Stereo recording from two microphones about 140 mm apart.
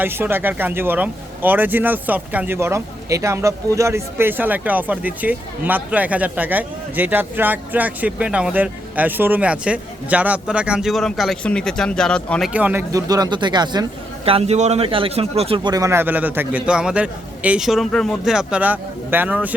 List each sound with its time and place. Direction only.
0.0 s speech: 15° right (ahead or behind); by 12.5 s 5° left (ahead or behind)
12.5 s speech: 10° right (ahead or behind)
12.9 s speech: 25° right (ahead or behind)
14.3 s speech: 45° right (ahead or behind); by 19.5 s 10° right (ahead or behind)